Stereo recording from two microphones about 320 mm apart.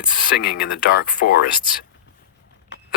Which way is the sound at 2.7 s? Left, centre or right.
Left.